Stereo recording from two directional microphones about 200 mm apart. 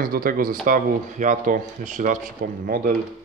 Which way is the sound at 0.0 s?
45° right (ahead or behind).